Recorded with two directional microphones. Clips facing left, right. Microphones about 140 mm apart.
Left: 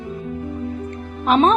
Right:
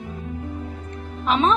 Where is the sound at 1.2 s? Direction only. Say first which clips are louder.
Left 4 dB; 45° left (ahead or behind).